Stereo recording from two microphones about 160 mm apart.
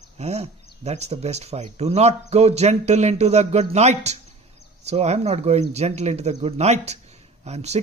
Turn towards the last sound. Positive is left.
turn(degrees=-45)  # may be behind; listen again after turning